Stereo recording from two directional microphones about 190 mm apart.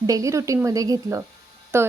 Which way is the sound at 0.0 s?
15° right (ahead or behind).